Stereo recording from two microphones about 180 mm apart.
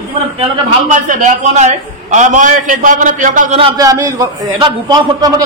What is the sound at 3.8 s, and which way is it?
A man's voice, 20° right (ahead or behind).